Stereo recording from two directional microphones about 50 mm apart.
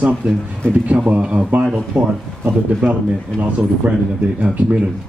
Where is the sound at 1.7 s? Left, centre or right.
Right.